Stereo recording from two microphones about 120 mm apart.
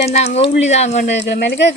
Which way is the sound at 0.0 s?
60° left (ahead or behind).